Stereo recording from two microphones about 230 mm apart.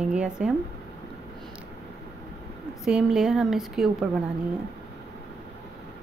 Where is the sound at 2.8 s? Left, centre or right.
Centre.